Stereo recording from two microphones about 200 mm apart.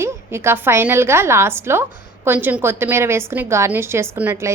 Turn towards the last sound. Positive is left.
turn(degrees=-10)  # may be behind; listen again after turning